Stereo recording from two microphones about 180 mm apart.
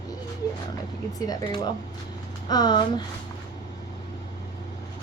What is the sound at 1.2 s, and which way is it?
A woman's voice, 20° left (ahead or behind).